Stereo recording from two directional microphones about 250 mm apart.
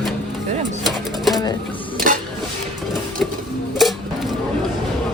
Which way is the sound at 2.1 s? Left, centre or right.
Right.